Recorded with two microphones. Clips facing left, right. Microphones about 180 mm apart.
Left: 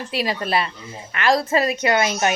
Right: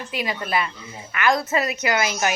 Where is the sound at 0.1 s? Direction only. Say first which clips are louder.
Left 3 dB; 30° left (ahead or behind).